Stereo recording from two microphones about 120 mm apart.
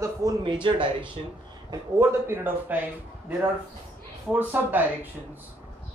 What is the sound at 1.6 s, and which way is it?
Speech, 20° right (ahead or behind).